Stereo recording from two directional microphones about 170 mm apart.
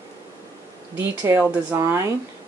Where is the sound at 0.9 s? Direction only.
10° right (ahead or behind).